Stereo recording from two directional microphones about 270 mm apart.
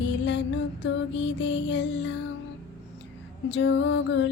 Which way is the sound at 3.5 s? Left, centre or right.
Left.